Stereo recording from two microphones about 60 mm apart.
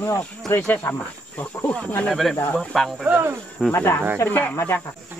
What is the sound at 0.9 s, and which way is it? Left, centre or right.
Speech, left.